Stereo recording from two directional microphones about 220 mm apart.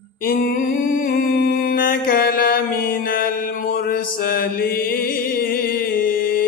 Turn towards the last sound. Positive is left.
turn(degrees=40)  # may be behind; listen again after turning